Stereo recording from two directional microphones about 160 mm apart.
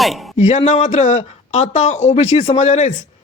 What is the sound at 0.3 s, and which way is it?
Speech, 45° left (ahead or behind).